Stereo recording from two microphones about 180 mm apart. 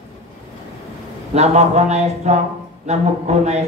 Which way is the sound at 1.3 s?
40° right (ahead or behind).